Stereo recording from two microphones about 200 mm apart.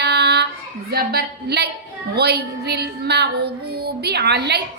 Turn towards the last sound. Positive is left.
turn(degrees=-55)  # may be behind; listen again after turning